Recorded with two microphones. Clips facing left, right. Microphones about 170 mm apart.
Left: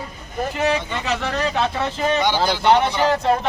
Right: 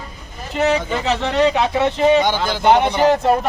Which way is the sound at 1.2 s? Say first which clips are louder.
Right 7 dB; 20° right (ahead or behind).